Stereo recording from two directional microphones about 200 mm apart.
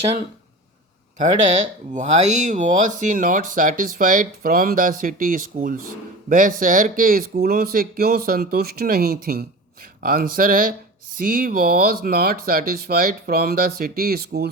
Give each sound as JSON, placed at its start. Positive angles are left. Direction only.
{"t": 1.9, "sound": "speech", "side_deg": -40}